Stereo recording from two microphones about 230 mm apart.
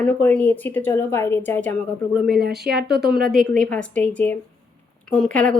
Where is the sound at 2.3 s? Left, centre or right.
Right.